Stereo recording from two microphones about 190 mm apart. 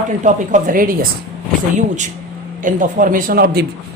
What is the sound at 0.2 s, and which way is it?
Speech, 40° right (ahead or behind).